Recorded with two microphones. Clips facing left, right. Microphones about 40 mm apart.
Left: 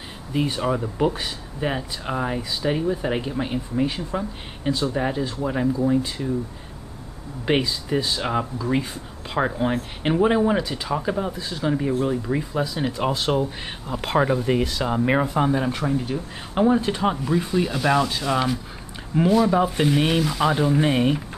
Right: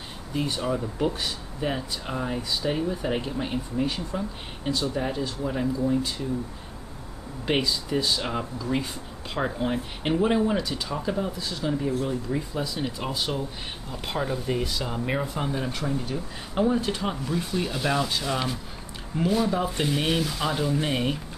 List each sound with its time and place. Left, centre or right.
0.3 s speech: centre
7.4 s speech: centre
11.7 s speech: left
12.7 s speech: centre
19.5 s speech: centre